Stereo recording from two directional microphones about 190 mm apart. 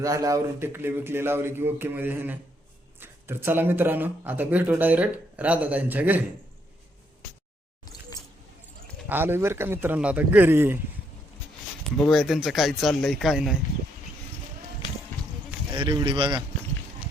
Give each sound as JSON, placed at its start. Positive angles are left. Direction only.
{"t": 0.0, "sound": "speech", "side_deg": -15}
{"t": 9.0, "sound": "speech", "side_deg": -10}
{"t": 11.9, "sound": "speech", "side_deg": 0}
{"t": 15.8, "sound": "speech", "side_deg": -25}